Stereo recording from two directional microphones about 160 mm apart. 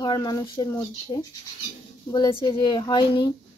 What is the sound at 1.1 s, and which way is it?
Speech, 35° left (ahead or behind).